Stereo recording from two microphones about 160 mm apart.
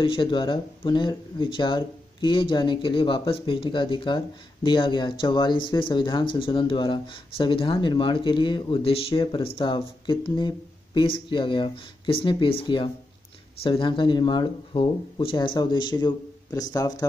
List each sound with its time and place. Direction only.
0.0 s speech: 30° left (ahead or behind)